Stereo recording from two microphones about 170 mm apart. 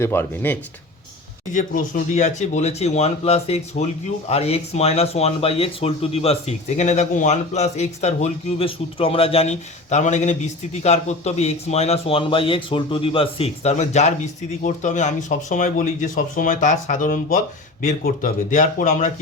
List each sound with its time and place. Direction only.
0.0 s speech: 15° left (ahead or behind)
1.5 s speech: 50° left (ahead or behind)